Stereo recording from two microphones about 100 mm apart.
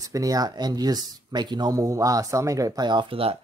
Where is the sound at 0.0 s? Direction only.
35° right (ahead or behind).